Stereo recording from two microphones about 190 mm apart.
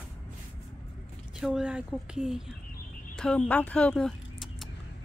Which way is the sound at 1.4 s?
5° right (ahead or behind).